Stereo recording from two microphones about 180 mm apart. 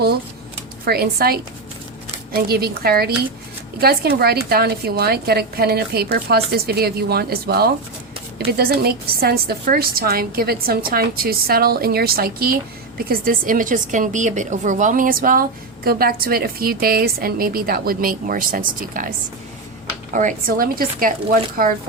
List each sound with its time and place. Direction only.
0.9 s a woman's voice: 60° right (ahead or behind)
20.1 s a woman's voice: 50° right (ahead or behind)